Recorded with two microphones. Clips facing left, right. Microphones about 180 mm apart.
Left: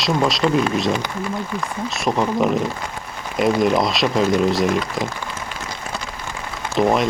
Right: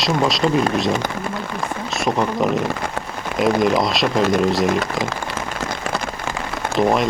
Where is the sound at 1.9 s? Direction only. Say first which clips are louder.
Even; centre (ahead or behind).